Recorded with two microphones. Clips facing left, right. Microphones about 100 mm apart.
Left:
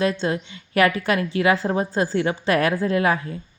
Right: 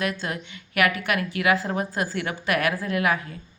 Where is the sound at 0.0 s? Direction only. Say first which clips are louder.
Left 6 dB; 30° left (ahead or behind).